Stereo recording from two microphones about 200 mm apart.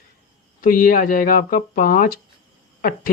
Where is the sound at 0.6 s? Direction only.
45° left (ahead or behind).